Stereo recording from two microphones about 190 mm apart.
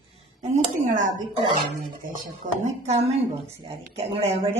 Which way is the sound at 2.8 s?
35° right (ahead or behind).